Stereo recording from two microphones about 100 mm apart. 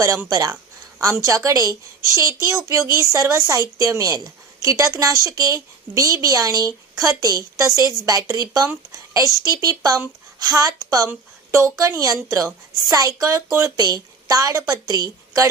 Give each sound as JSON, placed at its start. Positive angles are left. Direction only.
{"t": 0.3, "sound": "a woman's voice", "side_deg": -40}